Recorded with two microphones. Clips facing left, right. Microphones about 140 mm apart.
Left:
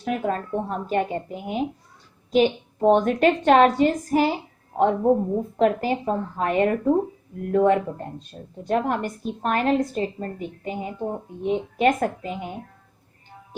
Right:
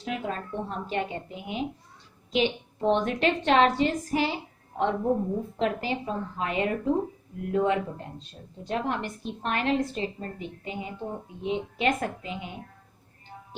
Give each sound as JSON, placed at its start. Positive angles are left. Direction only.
{"t": 0.0, "sound": "a woman's voice", "side_deg": 50}